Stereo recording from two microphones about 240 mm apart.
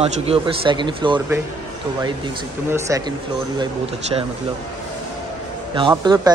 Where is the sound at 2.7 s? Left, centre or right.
Centre.